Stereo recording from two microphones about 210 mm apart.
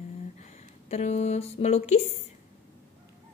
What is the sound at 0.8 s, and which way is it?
A woman's voice, 30° left (ahead or behind).